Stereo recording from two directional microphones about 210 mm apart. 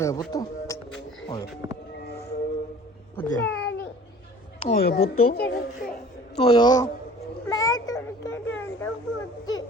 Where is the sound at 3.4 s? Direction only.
55° left (ahead or behind).